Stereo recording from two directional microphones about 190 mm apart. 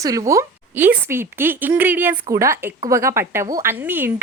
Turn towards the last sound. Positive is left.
turn(degrees=-10)  # may be behind; listen again after turning